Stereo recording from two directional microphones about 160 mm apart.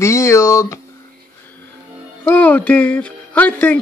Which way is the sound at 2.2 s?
10° left (ahead or behind).